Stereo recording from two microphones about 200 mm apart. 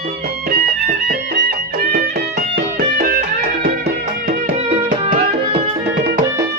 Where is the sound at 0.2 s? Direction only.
50° right (ahead or behind).